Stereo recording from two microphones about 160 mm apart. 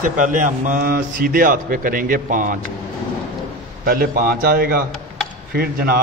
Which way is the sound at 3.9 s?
65° right (ahead or behind).